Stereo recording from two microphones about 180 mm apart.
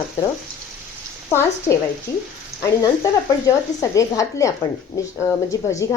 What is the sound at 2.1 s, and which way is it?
A woman's voice, 15° left (ahead or behind).